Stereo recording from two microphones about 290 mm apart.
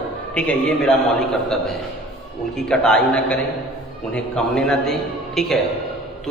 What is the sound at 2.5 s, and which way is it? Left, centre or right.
A man's voice, centre.